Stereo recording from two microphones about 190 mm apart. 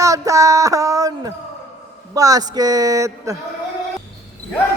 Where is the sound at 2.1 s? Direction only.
20° right (ahead or behind).